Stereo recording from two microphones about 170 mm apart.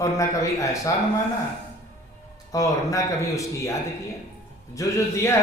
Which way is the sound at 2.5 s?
20° left (ahead or behind).